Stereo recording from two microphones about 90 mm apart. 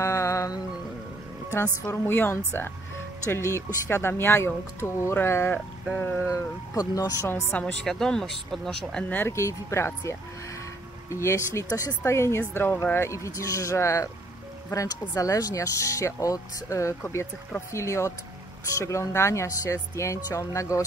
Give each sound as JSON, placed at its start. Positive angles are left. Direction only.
{"t": 0.0, "sound": "music", "side_deg": 30}
{"t": 1.5, "sound": "speech", "side_deg": 25}
{"t": 6.3, "sound": "speech", "side_deg": 40}
{"t": 7.2, "sound": "speech", "side_deg": 25}
{"t": 7.5, "sound": "speech", "side_deg": 10}
{"t": 9.1, "sound": "speech", "side_deg": 30}